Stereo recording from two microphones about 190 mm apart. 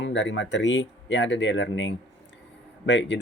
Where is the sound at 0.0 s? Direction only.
70° left (ahead or behind).